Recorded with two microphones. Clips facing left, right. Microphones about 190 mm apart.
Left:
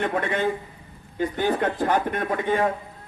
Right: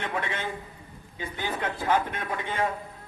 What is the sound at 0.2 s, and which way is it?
A man's voice, 50° left (ahead or behind).